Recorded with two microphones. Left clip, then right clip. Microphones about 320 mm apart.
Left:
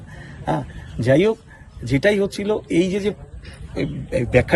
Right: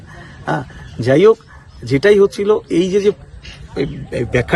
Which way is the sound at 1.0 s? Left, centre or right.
Centre.